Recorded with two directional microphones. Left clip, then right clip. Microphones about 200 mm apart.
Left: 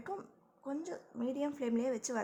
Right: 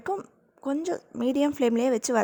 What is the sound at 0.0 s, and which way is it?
A woman's voice, 40° right (ahead or behind).